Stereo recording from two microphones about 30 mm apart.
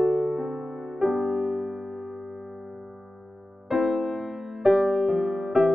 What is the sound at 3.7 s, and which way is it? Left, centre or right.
Music, centre.